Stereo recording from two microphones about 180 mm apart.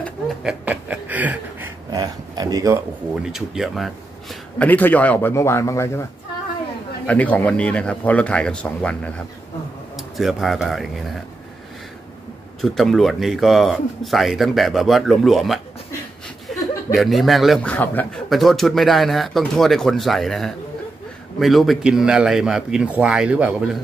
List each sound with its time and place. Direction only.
0.4 s a sound: 5° right (ahead or behind)
1.9 s a sound: 20° right (ahead or behind)
3.2 s a man's voice: 5° right (ahead or behind); by 6.0 s 15° left (ahead or behind)
7.1 s a man's voice: 10° left (ahead or behind)
12.6 s a man's voice: centre (ahead or behind)
16.5 s chuckle: centre (ahead or behind)
16.9 s a man's voice: centre (ahead or behind)